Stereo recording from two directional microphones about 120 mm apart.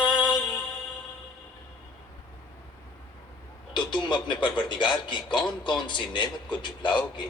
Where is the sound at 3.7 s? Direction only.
40° left (ahead or behind).